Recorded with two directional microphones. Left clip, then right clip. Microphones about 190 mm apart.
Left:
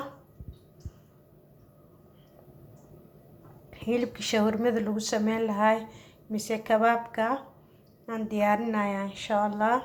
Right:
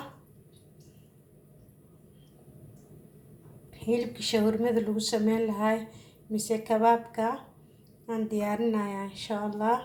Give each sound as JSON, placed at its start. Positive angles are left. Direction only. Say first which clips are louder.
{"t": 3.7, "sound": "a woman's voice", "louder": "even", "side_deg": 15}